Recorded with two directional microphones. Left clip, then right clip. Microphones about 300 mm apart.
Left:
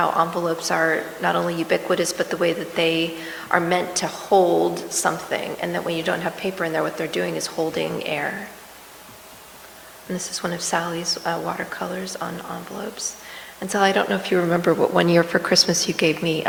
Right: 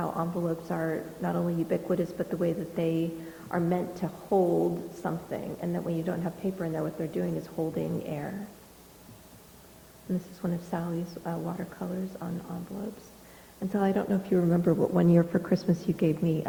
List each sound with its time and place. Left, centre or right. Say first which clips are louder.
0.0 s speech: left 12 dB; centre
4.3 s a woman's voice: left 8 dB; left
5.0 s speech: left 11 dB; centre
10.4 s speech: left 13 dB; centre